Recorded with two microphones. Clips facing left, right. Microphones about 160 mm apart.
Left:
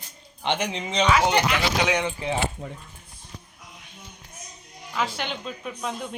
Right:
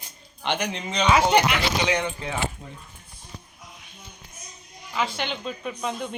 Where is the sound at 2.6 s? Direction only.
80° left.